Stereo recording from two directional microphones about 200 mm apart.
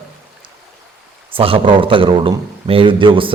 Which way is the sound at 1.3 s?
25° right (ahead or behind).